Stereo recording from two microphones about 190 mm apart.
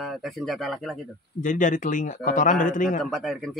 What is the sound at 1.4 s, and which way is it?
Speech, 40° left (ahead or behind).